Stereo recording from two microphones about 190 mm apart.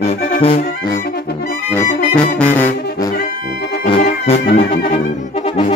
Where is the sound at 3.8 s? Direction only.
30° left (ahead or behind).